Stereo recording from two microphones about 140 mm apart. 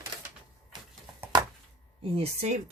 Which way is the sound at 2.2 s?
55° right (ahead or behind).